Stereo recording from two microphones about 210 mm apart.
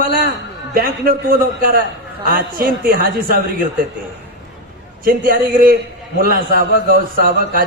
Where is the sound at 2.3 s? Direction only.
45° right (ahead or behind).